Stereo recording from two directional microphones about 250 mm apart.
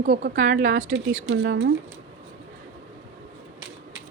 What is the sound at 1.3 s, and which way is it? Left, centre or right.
Speech, right.